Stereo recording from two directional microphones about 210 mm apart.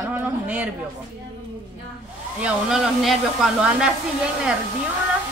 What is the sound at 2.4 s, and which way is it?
Speech, centre (ahead or behind).